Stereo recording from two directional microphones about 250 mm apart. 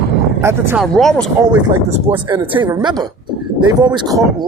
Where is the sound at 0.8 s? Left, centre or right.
Centre.